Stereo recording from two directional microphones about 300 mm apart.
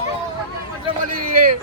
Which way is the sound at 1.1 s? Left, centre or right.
Right.